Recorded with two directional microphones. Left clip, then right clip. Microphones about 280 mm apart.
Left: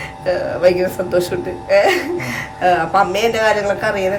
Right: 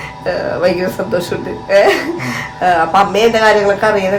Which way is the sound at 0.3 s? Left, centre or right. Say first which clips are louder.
Even; centre.